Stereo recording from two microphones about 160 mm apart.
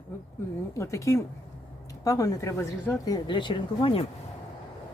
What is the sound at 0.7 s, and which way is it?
Speech, 20° left (ahead or behind).